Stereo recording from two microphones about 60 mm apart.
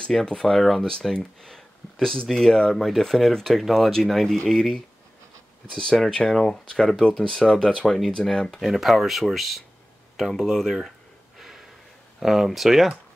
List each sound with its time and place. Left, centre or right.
0.0 s speech: centre
8.5 s speech: centre
11.3 s snort: centre
12.2 s speech: centre